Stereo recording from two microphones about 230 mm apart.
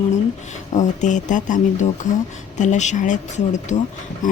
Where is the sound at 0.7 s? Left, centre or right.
Left.